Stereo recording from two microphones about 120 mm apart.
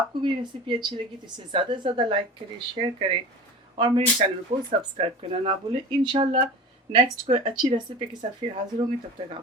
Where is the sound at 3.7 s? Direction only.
40° right (ahead or behind).